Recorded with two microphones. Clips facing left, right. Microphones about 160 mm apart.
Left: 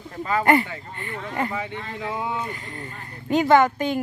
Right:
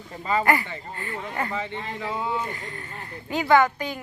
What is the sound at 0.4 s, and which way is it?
Speech, 25° left (ahead or behind).